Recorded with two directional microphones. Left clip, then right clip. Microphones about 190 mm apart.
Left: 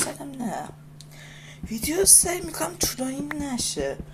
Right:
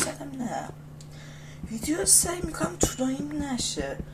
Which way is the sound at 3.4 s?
50° left (ahead or behind).